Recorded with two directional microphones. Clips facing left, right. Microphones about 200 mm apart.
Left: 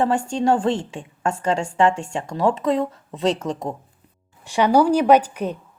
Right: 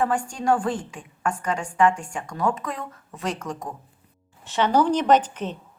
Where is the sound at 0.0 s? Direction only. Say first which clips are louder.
Left 4 dB; 25° left (ahead or behind).